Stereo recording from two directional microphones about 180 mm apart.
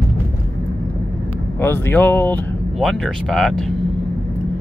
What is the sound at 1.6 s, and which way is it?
Speech, 10° left (ahead or behind).